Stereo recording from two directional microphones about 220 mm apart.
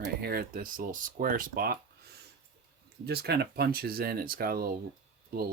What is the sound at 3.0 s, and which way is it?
Speech, 45° right (ahead or behind).